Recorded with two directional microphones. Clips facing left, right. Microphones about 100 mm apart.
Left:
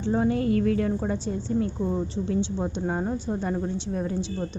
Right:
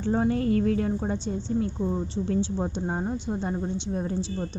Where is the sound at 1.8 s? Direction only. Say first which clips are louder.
Left 1 dB; centre (ahead or behind).